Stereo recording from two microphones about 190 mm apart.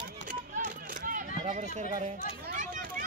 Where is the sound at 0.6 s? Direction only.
45° right (ahead or behind).